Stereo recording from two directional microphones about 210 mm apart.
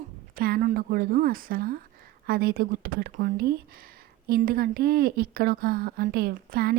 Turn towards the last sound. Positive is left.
turn(degrees=-45)  # may be behind; listen again after turning